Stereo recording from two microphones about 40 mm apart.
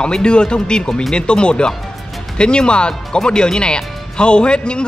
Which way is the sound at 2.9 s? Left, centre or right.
Centre.